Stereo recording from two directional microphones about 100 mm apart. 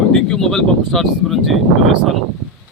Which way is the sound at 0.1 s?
5° left (ahead or behind).